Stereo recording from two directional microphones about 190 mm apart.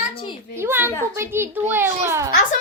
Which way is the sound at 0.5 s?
10° right (ahead or behind).